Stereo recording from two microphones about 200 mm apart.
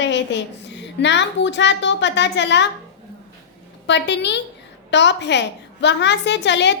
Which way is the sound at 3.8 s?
60° left (ahead or behind).